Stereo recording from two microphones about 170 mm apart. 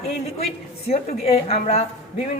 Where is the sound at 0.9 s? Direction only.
35° left (ahead or behind).